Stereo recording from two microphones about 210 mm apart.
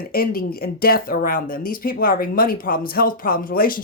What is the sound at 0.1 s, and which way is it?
Speech, 45° left (ahead or behind).